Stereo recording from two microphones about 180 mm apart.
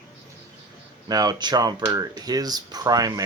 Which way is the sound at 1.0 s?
20° right (ahead or behind).